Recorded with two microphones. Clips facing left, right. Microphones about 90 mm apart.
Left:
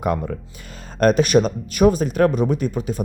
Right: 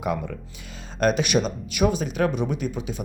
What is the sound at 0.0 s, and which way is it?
Speech, 50° left (ahead or behind).